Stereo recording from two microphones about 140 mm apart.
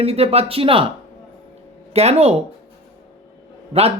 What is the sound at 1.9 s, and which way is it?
Speech, 50° right (ahead or behind).